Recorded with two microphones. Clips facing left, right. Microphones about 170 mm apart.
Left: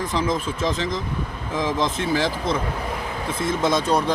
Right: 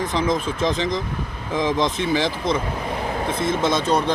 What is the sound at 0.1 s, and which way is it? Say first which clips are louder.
Speech: right 2 dB; 5° left (ahead or behind).